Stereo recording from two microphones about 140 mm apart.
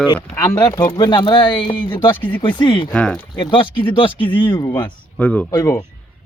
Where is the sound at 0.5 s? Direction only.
30° left (ahead or behind).